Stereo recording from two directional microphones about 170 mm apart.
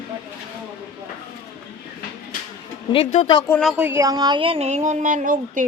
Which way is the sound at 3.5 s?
5° left (ahead or behind).